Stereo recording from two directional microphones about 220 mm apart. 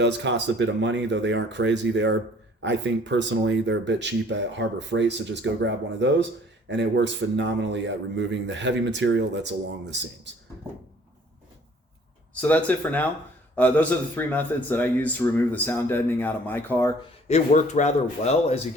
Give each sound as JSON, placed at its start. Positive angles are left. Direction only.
{"t": 0.0, "sound": "speech", "side_deg": -55}
{"t": 12.3, "sound": "a man's voice", "side_deg": 5}
{"t": 17.2, "sound": "speech", "side_deg": 30}